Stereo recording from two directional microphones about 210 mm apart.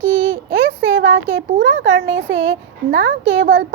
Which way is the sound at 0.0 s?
60° right (ahead or behind).